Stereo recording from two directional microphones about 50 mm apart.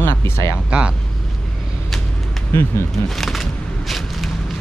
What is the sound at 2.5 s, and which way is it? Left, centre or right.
Speech, left.